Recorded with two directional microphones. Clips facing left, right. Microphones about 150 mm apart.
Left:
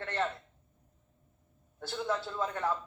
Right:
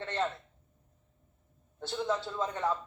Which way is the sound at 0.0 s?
20° right (ahead or behind).